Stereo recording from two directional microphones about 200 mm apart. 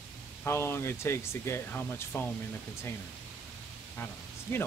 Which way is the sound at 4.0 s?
10° left (ahead or behind).